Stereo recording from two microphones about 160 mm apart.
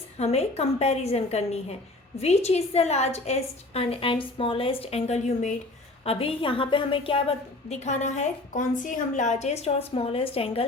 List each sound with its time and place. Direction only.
0.2 s a woman's voice: 40° left (ahead or behind)
6.1 s a woman's voice: 35° left (ahead or behind)
7.7 s a woman's voice: 45° left (ahead or behind)